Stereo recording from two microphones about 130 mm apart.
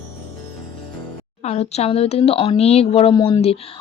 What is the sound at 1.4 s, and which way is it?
Speech, 55° left (ahead or behind).